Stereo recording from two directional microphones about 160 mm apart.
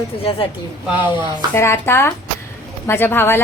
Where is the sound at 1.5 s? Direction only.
15° left (ahead or behind).